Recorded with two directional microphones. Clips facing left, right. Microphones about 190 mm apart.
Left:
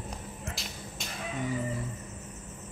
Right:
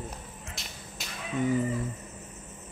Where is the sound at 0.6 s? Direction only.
Centre (ahead or behind).